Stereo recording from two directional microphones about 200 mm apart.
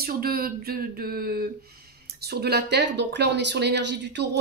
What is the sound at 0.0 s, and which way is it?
A woman's voice, 50° right (ahead or behind).